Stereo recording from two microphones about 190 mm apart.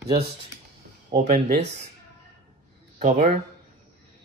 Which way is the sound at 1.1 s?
35° right (ahead or behind).